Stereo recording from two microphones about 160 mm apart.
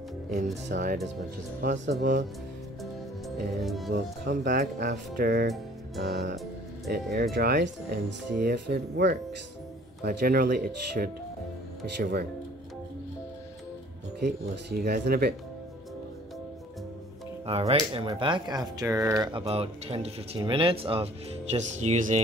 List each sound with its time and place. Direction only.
0.7 s speech: 90° right
1.6 s speech: 80° right
2.8 s music: centre (ahead or behind)
3.9 s speech: 70° right (ahead or behind)
5.9 s speech: 90° right
6.9 s speech: 75° right (ahead or behind)
7.3 s speech: 90° right
10.0 s speech: 70° right (ahead or behind)
14.2 s speech: 80° right
17.5 s speech: 40° right (ahead or behind); by 19.3 s 20° right (ahead or behind)
19.3 s speech: 40° right (ahead or behind)